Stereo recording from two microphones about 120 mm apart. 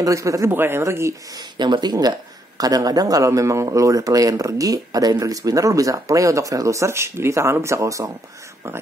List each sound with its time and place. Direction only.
0.0 s speech: 25° right (ahead or behind)
1.4 s speech: 35° right (ahead or behind)